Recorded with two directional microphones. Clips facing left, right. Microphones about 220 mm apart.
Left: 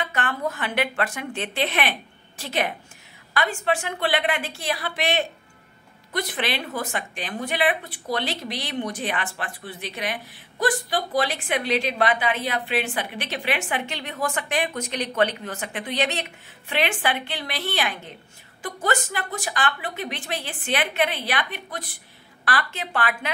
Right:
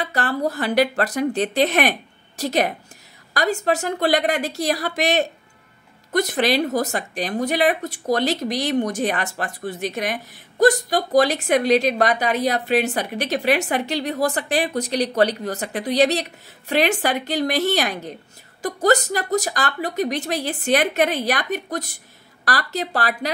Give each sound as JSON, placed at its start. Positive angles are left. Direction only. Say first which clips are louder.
{"t": 0.0, "sound": "speech", "louder": "right 4 dB", "side_deg": -35}